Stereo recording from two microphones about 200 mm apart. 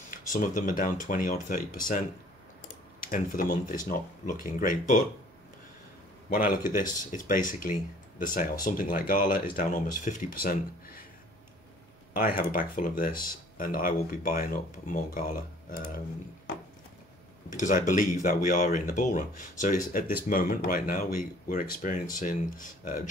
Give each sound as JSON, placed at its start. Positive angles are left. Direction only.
{"t": 0.4, "sound": "speech", "side_deg": 40}
{"t": 6.8, "sound": "speech", "side_deg": 40}
{"t": 12.1, "sound": "speech", "side_deg": 45}
{"t": 17.6, "sound": "speech", "side_deg": 40}